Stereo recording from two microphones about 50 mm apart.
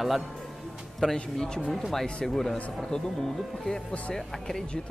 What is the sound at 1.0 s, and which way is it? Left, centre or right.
Speech, centre.